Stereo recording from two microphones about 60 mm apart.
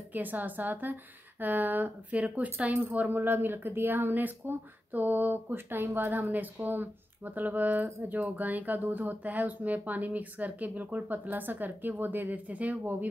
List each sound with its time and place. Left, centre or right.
0.1 s speech: right